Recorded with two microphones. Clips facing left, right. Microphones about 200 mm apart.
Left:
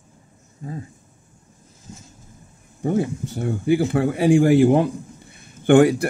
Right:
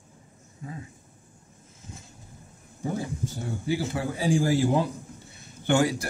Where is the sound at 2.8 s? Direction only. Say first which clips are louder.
Left 9 dB; 60° left (ahead or behind).